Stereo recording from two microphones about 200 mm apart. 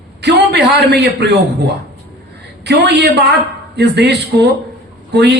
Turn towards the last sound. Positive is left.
turn(degrees=-60)  # may be behind; listen again after turning